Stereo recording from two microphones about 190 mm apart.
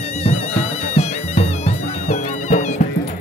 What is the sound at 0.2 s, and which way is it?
Music, 35° left (ahead or behind).